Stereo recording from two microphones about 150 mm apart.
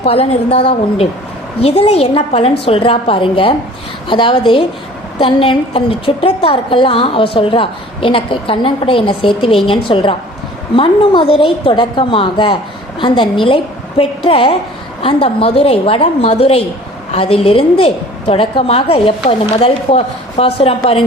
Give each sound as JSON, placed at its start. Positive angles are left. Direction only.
{"t": 0.0, "sound": "a woman's voice", "side_deg": 45}